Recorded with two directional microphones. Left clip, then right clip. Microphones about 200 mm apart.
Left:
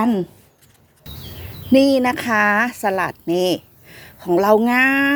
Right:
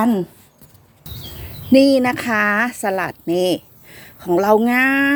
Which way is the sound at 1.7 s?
Centre (ahead or behind).